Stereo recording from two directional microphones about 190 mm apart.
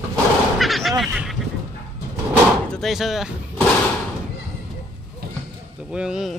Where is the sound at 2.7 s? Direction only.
Centre (ahead or behind).